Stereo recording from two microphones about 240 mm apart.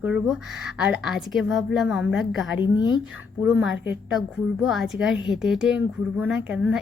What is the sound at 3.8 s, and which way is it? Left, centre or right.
Speech, centre.